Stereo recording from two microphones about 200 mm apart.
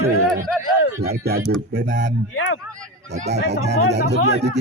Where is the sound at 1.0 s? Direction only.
50° right (ahead or behind).